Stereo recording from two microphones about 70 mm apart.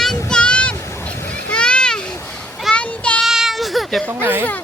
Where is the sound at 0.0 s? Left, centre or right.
Centre.